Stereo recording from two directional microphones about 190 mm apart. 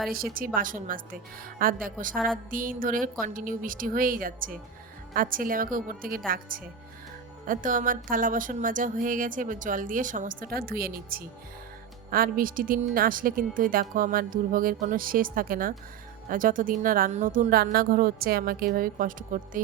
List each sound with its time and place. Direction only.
0.1 s speech: 50° right (ahead or behind)
2.1 s music: 5° left (ahead or behind)
2.5 s speech: 45° right (ahead or behind)